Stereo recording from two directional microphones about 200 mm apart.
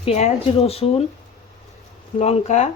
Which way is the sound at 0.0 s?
35° left (ahead or behind).